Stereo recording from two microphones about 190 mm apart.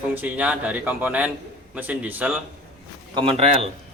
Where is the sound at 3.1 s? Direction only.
30° right (ahead or behind).